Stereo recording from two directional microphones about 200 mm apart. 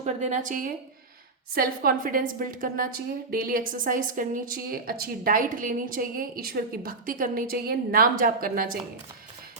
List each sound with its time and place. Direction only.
0.0 s a woman's voice: 35° right (ahead or behind)